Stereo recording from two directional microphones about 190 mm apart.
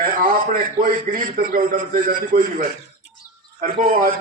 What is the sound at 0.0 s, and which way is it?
A man's voice, 50° right (ahead or behind).